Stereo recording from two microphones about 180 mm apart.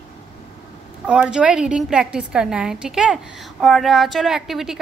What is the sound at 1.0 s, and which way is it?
A woman's voice, 5° right (ahead or behind).